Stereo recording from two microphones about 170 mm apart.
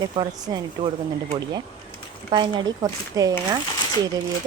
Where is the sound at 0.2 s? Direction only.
25° right (ahead or behind).